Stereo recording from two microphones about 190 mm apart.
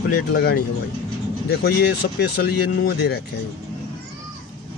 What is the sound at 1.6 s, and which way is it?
Speech, 60° left (ahead or behind).